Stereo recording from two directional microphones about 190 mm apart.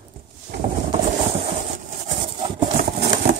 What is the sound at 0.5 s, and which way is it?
Vehicle, 65° right (ahead or behind).